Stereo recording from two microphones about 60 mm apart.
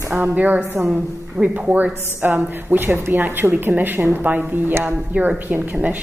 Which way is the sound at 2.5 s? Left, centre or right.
Right.